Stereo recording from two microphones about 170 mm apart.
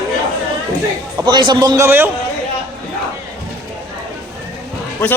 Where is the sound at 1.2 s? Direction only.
25° right (ahead or behind).